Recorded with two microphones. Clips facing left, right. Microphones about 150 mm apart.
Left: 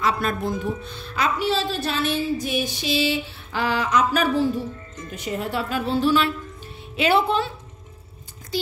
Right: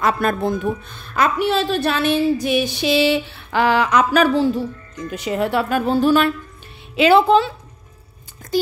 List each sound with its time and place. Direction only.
0.0 s a woman's voice: 55° right (ahead or behind)
7.0 s a woman's voice: 90° right